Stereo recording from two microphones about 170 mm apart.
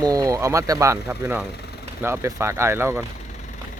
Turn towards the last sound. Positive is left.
turn(degrees=-15)  # may be behind; listen again after turning